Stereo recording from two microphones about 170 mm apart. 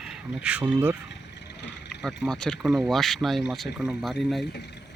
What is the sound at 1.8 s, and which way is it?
Speech, centre (ahead or behind).